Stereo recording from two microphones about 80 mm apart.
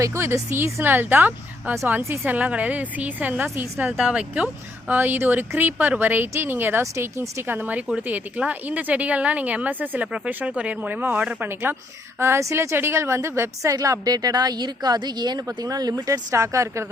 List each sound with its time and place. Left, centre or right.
0.0 s a woman's voice: right; by 4.4 s centre
4.9 s a woman's voice: right
15.4 s a woman's voice: right